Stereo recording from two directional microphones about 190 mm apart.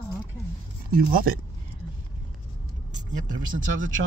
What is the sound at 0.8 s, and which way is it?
Speech, 50° right (ahead or behind).